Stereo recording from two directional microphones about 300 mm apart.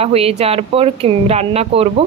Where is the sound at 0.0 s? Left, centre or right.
Centre.